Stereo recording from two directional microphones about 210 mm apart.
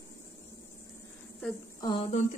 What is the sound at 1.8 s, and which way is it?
Speech, 25° left (ahead or behind).